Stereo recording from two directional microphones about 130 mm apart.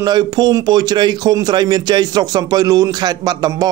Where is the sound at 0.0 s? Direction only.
35° right (ahead or behind).